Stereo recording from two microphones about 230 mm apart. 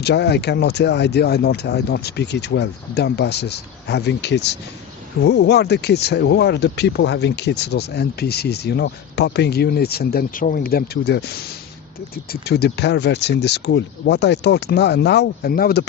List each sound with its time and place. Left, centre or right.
0.0 s speech: left